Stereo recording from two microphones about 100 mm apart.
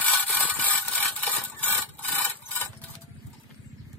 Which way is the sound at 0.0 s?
15° left (ahead or behind).